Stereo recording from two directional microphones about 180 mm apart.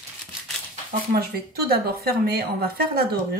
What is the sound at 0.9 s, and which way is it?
A woman's voice, 60° right (ahead or behind).